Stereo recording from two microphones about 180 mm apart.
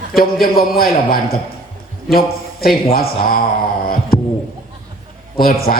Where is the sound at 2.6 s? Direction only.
55° left (ahead or behind).